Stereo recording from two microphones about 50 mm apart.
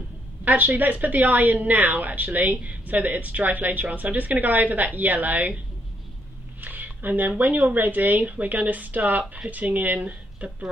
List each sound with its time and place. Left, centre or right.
0.5 s a woman's voice: right
6.6 s a woman's voice: right